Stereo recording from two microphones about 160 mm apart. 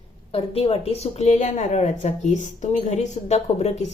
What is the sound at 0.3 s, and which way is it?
Speech, 35° left (ahead or behind).